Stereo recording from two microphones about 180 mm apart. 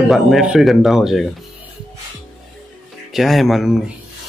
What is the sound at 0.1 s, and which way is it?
Speech, centre (ahead or behind).